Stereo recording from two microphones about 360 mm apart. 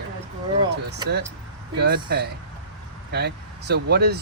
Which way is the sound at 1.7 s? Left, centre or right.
Right.